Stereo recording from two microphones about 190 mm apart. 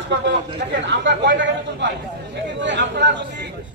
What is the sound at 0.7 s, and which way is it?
A man's voice, 70° right (ahead or behind).